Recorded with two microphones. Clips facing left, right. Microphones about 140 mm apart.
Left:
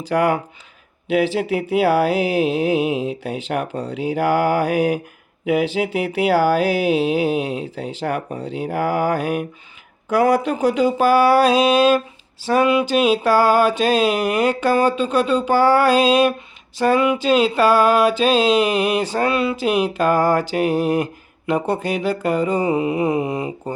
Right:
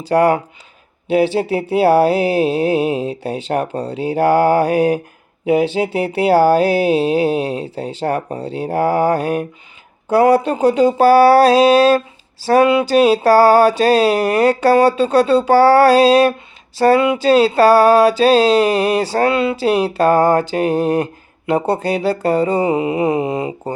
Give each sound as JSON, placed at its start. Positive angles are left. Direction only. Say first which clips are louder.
{"t": 0.1, "sound": "speech", "louder": "right 5 dB", "side_deg": -35}
{"t": 10.1, "sound": "mantra", "louder": "right 4 dB", "side_deg": -30}
{"t": 12.4, "sound": "speech", "louder": "right 4 dB", "side_deg": -40}
{"t": 15.9, "sound": "speech", "louder": "right 4 dB", "side_deg": -35}
{"t": 19.3, "sound": "mantra", "louder": "right 3 dB", "side_deg": -25}